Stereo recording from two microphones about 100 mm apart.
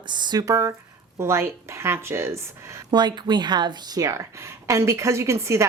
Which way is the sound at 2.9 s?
45° right (ahead or behind).